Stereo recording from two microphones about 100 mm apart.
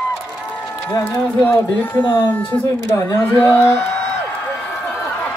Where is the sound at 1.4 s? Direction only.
20° left (ahead or behind).